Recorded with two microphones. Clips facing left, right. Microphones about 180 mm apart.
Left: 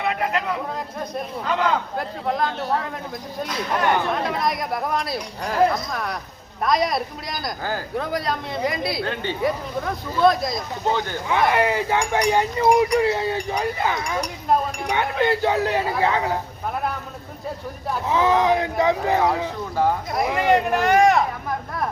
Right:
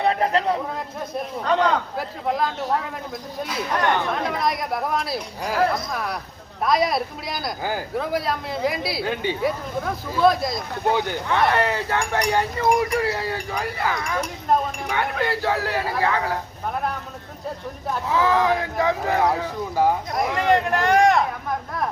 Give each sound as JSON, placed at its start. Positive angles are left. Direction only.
{"t": 0.0, "sound": "a sound", "side_deg": -35}
{"t": 1.6, "sound": "speech", "side_deg": -5}
{"t": 3.5, "sound": "speech", "side_deg": -5}
{"t": 11.3, "sound": "speech", "side_deg": 15}
{"t": 18.1, "sound": "speech", "side_deg": 20}
{"t": 20.1, "sound": "speech", "side_deg": 5}